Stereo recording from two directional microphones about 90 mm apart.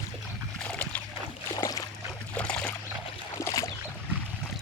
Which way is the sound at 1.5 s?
45° left (ahead or behind).